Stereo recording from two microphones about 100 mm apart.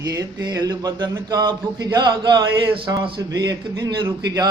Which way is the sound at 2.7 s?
60° right (ahead or behind).